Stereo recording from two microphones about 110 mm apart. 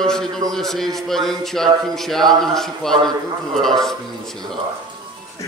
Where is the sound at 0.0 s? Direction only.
5° left (ahead or behind).